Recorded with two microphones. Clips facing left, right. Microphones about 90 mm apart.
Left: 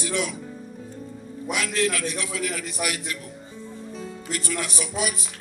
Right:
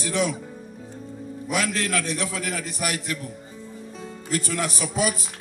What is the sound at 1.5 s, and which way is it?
Speech, 35° right (ahead or behind).